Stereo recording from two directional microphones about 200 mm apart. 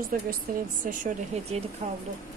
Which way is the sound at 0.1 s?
45° right (ahead or behind).